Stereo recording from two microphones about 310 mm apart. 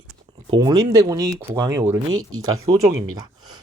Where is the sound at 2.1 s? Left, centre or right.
Right.